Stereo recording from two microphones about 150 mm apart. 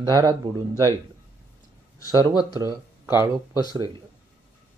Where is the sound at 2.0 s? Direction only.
25° left (ahead or behind).